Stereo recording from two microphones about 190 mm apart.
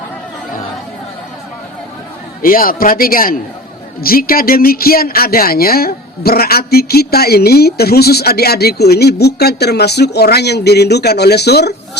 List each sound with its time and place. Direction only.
2.4 s a man's voice: 50° left (ahead or behind)